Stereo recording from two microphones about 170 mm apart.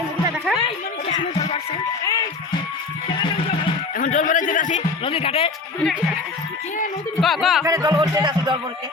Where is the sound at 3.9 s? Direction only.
50° left (ahead or behind).